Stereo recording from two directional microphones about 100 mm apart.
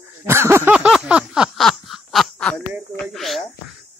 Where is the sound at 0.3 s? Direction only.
25° right (ahead or behind).